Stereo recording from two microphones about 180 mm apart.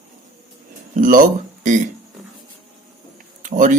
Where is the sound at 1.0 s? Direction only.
50° right (ahead or behind).